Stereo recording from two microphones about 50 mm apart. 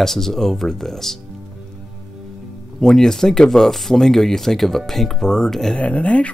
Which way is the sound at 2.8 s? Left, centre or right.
Centre.